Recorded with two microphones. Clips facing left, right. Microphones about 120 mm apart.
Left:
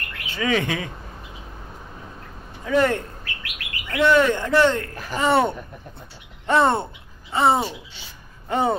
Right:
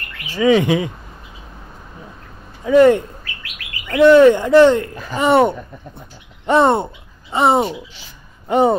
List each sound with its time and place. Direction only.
0.4 s speech: 20° right (ahead or behind)
2.6 s speech: 20° right (ahead or behind)